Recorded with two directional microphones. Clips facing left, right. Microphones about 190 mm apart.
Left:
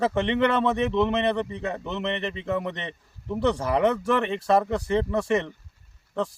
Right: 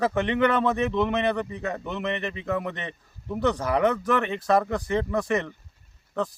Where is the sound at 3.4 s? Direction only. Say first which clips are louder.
Left 1 dB; 30° left (ahead or behind).